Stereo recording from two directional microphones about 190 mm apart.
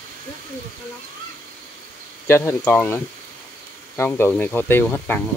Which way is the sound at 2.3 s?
15° left (ahead or behind).